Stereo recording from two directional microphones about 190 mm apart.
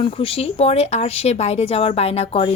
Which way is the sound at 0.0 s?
30° left (ahead or behind).